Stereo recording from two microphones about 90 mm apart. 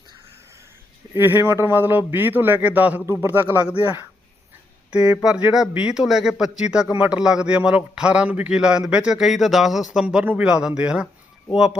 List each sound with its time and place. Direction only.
1.1 s a man's voice: 25° right (ahead or behind)
4.9 s a man's voice: 10° right (ahead or behind)